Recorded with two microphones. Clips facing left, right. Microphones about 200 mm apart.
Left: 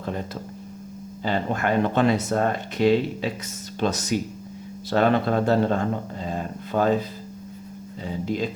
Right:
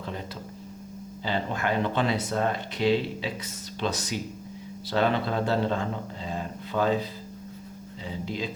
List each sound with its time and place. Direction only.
1.2 s speech: 50° left (ahead or behind)
8.0 s speech: 45° left (ahead or behind)